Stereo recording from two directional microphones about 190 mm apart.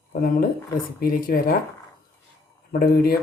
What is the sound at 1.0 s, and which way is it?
Speech, 50° left (ahead or behind).